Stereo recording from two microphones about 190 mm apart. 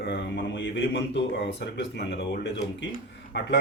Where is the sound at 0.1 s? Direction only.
65° left (ahead or behind).